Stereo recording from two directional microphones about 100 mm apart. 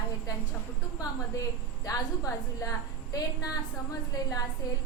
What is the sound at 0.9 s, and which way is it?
A woman's voice, 35° left (ahead or behind).